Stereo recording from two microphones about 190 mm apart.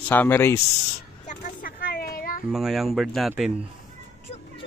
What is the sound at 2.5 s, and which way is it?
Speech, centre (ahead or behind).